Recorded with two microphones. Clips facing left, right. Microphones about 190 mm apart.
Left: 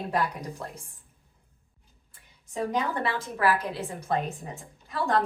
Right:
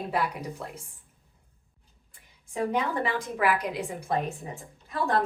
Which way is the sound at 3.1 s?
15° right (ahead or behind).